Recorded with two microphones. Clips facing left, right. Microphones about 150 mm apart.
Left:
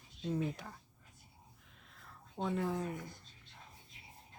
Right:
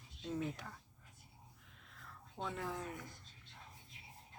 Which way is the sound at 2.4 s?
25° left (ahead or behind).